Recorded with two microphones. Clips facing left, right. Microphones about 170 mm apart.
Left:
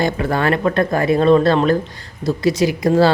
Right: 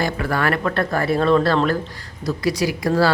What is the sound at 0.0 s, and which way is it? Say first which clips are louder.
A woman's voice: left 3 dB; 20° left (ahead or behind).